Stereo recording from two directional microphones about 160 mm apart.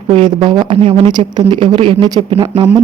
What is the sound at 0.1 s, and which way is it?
A woman's voice, 35° right (ahead or behind).